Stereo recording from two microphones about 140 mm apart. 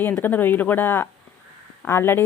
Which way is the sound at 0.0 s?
15° left (ahead or behind).